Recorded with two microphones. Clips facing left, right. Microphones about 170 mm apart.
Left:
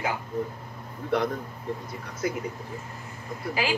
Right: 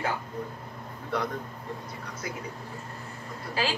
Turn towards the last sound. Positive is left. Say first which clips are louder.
# left 2 dB
turn(degrees=15)  # may be behind; listen again after turning